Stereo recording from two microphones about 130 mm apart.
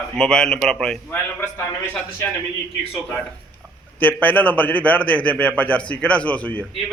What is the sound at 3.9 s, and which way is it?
A man's voice, 10° left (ahead or behind).